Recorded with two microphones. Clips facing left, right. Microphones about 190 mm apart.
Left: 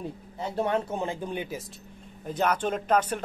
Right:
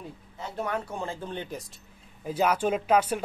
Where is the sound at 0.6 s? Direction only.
25° left (ahead or behind).